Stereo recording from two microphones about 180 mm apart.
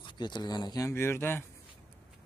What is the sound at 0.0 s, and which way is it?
Speech, 25° left (ahead or behind).